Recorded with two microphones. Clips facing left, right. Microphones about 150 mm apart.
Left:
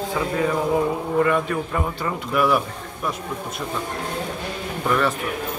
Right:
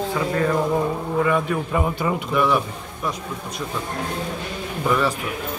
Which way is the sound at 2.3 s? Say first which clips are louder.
Left 1 dB; 5° left (ahead or behind).